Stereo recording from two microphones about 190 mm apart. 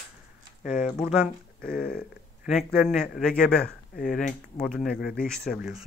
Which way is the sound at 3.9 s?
45° left (ahead or behind).